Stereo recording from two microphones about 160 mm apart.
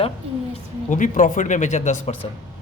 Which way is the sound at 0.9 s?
50° left (ahead or behind).